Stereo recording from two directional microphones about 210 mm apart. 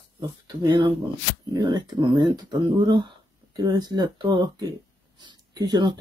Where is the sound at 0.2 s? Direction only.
20° right (ahead or behind).